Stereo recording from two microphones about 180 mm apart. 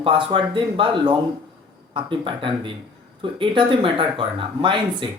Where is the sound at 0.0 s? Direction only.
30° right (ahead or behind).